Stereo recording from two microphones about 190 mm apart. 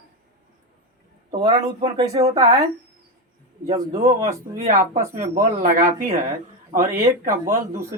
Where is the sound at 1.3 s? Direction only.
30° right (ahead or behind).